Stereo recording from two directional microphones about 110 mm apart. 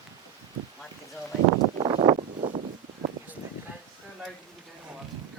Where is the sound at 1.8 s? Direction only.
55° right (ahead or behind).